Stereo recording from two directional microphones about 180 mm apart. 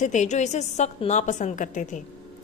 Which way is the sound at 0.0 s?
40° left (ahead or behind).